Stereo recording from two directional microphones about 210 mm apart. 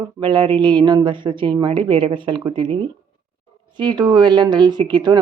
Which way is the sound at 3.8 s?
20° right (ahead or behind).